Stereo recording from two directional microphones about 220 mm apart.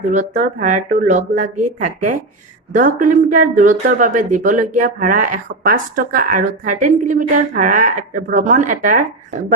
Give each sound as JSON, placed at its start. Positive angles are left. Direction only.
{"t": 0.1, "sound": "speech", "side_deg": -35}